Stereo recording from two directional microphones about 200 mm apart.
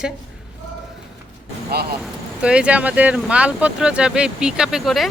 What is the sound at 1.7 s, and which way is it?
Speech, 50° right (ahead or behind).